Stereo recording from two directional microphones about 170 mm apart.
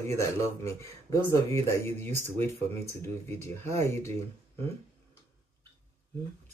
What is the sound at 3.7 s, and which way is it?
Speech, 15° left (ahead or behind).